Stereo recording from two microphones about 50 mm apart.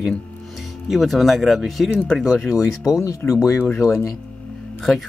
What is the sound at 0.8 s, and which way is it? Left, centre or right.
Speech, centre.